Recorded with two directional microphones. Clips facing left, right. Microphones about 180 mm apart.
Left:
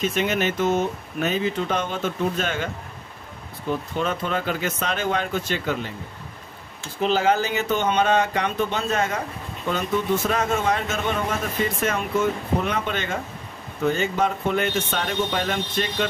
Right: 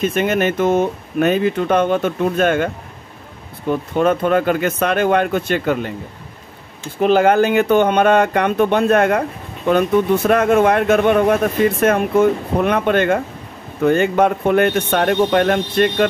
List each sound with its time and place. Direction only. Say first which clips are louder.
0.0 s a man's voice: right 6 dB; 50° right (ahead or behind)
3.9 s a man's voice: right 13 dB; 55° right (ahead or behind)
7.0 s a man's voice: right 8 dB; 55° right (ahead or behind)